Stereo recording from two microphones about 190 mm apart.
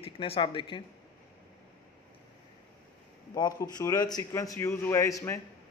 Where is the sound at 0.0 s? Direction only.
30° left (ahead or behind).